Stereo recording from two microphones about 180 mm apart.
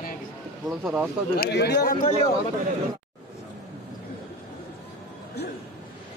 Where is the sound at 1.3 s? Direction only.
65° left (ahead or behind).